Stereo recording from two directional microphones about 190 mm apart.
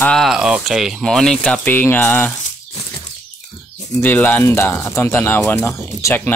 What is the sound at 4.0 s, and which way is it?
Speech, 10° left (ahead or behind).